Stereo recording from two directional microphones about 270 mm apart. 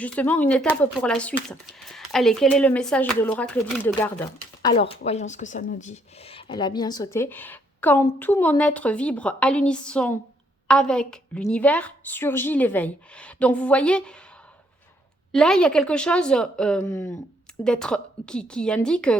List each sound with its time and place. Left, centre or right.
0.0 s speech: centre
4.6 s a woman's voice: centre
15.3 s speech: centre